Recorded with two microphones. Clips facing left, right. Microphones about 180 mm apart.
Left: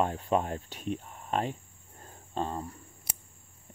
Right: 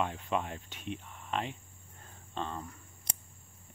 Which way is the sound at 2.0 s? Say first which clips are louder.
Left 5 dB; 40° left (ahead or behind).